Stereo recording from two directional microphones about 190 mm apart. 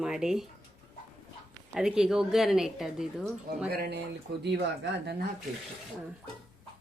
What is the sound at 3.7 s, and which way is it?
Speech, 55° right (ahead or behind).